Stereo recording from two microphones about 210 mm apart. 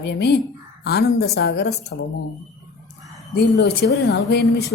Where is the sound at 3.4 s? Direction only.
55° left (ahead or behind).